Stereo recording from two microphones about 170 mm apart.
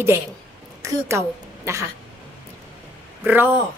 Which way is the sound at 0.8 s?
15° right (ahead or behind).